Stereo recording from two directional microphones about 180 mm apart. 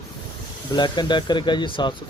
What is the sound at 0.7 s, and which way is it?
Speech, 25° left (ahead or behind).